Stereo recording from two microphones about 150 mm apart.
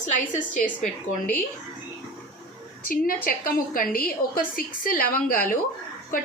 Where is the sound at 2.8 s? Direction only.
70° left (ahead or behind).